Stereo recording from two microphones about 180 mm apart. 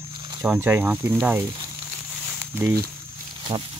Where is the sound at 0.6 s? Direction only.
15° right (ahead or behind).